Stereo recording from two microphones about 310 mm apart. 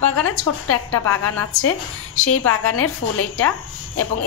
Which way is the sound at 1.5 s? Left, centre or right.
Left.